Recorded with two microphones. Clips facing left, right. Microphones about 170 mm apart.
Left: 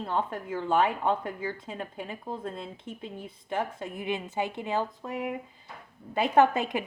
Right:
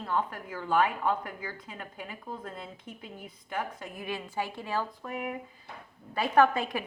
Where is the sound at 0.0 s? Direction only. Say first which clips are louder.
Left 1 dB; 25° left (ahead or behind).